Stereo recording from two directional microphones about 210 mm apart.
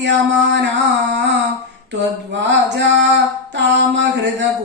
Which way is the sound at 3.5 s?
55° right (ahead or behind).